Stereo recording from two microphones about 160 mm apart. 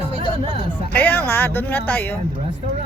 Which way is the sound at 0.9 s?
10° left (ahead or behind).